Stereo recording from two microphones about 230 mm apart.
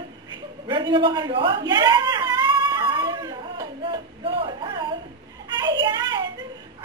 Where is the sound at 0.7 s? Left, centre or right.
Centre.